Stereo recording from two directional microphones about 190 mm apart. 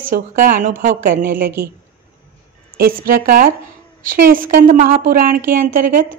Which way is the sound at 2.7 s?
50° right (ahead or behind).